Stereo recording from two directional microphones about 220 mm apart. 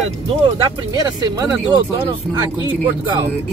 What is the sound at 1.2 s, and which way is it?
Speech, 20° right (ahead or behind).